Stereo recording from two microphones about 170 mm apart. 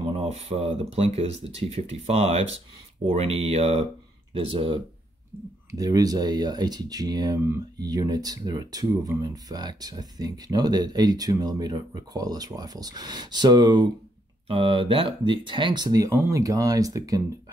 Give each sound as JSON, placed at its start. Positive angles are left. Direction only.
{"t": 0.1, "sound": "speech", "side_deg": -35}
{"t": 5.7, "sound": "speech", "side_deg": -20}